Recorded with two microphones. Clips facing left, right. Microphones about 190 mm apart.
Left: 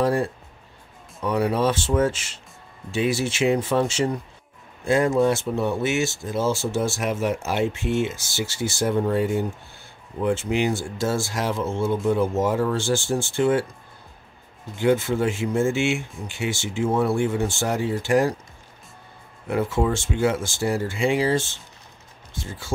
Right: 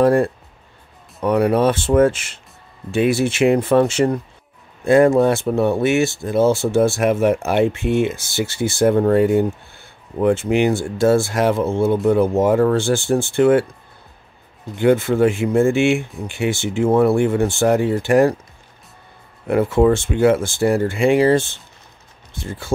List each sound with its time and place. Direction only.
0.0 s speech: 55° right (ahead or behind)
14.8 s speech: 60° right (ahead or behind)
19.4 s speech: 60° right (ahead or behind)